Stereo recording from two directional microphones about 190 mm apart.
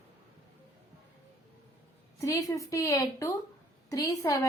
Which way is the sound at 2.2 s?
15° left (ahead or behind).